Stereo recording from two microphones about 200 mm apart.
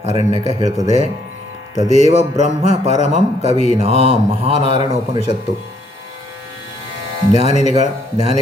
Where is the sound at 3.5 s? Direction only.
35° left (ahead or behind).